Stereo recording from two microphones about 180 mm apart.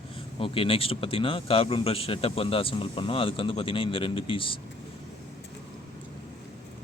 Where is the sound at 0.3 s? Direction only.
30° left (ahead or behind).